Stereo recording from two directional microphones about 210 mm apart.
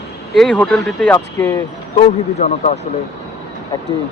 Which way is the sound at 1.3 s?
15° left (ahead or behind).